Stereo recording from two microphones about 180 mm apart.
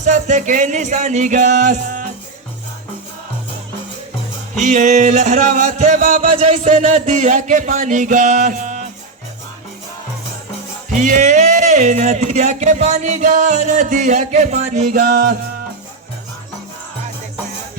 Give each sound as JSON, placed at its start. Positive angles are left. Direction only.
{"t": 0.0, "sound": "music", "side_deg": -40}
{"t": 4.5, "sound": "speech", "side_deg": -40}
{"t": 10.9, "sound": "speech", "side_deg": -45}